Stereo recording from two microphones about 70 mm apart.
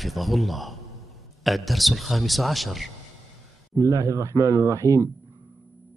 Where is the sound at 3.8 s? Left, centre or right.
Right.